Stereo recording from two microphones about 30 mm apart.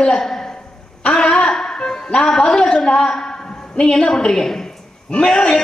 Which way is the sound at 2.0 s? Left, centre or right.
Left.